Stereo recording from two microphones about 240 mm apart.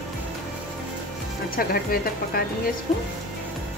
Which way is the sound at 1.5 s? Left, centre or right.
Left.